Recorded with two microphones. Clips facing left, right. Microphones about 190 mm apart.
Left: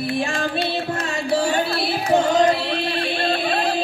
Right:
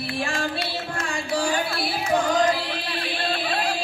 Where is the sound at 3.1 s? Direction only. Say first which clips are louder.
Left 3 dB; 25° left (ahead or behind).